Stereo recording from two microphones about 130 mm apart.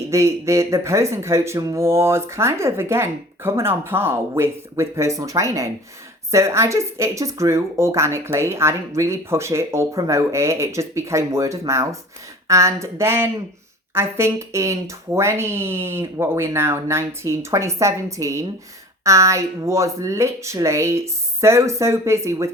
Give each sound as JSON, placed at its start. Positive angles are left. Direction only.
{"t": 0.1, "sound": "speech", "side_deg": -25}